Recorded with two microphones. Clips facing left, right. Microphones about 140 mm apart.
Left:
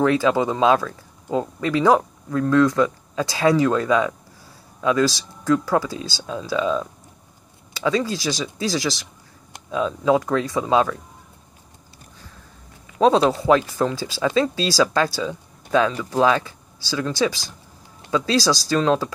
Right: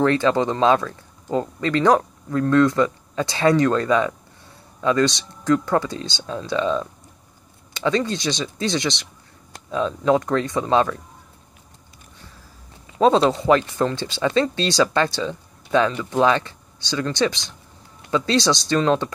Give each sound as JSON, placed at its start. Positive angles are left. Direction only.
{"t": 0.0, "sound": "speech", "side_deg": 5}
{"t": 13.0, "sound": "speech", "side_deg": 0}